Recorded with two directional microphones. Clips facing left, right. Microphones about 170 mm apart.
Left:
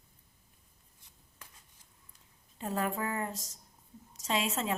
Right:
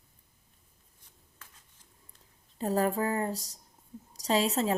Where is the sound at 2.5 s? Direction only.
35° right (ahead or behind).